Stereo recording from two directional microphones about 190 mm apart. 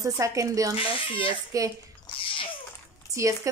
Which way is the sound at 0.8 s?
25° left (ahead or behind).